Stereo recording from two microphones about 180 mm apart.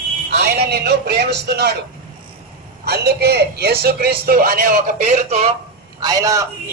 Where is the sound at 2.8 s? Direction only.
65° right (ahead or behind); by 5.5 s 40° right (ahead or behind).